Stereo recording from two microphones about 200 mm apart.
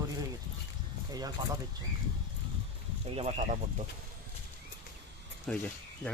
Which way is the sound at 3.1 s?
35° right (ahead or behind).